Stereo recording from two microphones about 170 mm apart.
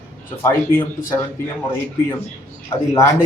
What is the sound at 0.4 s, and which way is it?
Speech, 15° left (ahead or behind).